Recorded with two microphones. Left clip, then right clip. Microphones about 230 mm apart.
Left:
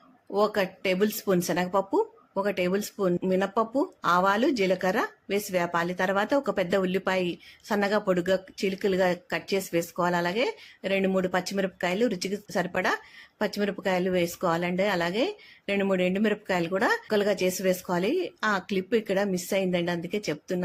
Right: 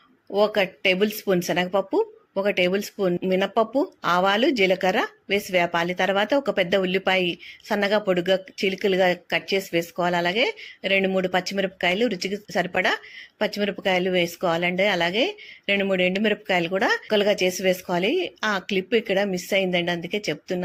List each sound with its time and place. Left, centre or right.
0.3 s speech: centre